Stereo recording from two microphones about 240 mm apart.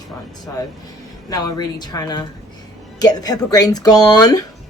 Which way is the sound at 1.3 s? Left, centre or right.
Centre.